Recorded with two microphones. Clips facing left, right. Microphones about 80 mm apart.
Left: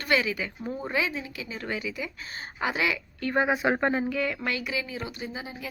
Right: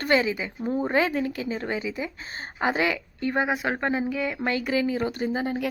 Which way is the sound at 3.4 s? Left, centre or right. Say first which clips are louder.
Left 1 dB; centre.